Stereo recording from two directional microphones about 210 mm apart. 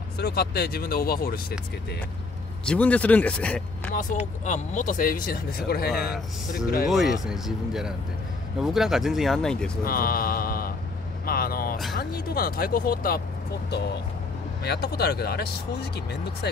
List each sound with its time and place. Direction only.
0.2 s speech: 50° left (ahead or behind)
2.6 s speech: 5° left (ahead or behind)
3.9 s speech: 40° left (ahead or behind)
6.9 s speech: centre (ahead or behind)
9.8 s mantra: 45° left (ahead or behind)
11.2 s vehicle: 45° left (ahead or behind)
12.0 s speech: 45° left (ahead or behind)